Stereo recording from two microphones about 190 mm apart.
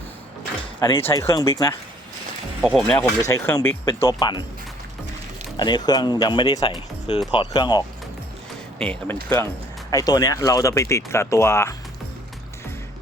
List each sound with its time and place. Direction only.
0.8 s speech: 15° left (ahead or behind)
2.6 s speech: centre (ahead or behind)
3.2 s speech: 15° left (ahead or behind)
5.5 s speech: 20° left (ahead or behind)
8.8 s speech: 5° left (ahead or behind)
9.9 s speech: 20° left (ahead or behind)